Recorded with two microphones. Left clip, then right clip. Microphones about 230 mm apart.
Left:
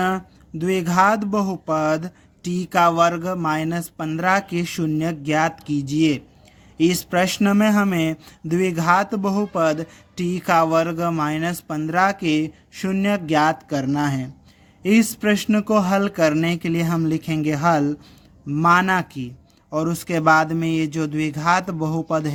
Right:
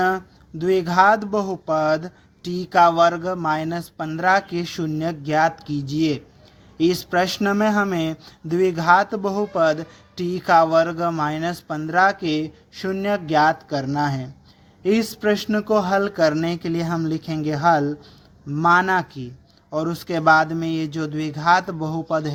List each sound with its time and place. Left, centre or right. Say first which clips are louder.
0.6 s speech: right 2 dB; left